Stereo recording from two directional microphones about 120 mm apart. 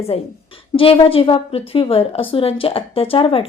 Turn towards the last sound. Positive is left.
turn(degrees=50)  # may be behind; listen again after turning